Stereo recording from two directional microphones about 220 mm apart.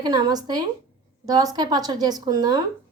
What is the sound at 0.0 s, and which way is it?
A woman's voice, 20° right (ahead or behind).